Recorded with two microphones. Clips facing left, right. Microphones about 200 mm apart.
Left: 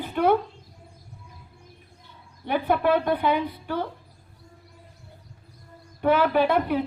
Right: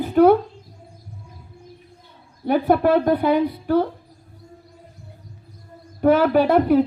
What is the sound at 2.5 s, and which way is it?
A woman's voice, 45° right (ahead or behind).